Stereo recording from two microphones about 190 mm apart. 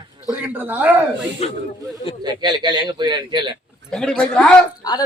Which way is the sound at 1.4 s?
35° left (ahead or behind).